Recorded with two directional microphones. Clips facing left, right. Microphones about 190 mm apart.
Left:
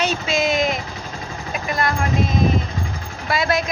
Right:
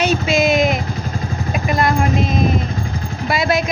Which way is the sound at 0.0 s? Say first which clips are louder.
Right 5 dB; 10° right (ahead or behind).